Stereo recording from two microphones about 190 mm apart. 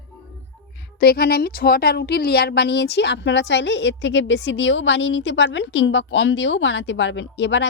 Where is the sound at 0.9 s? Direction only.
55° left (ahead or behind).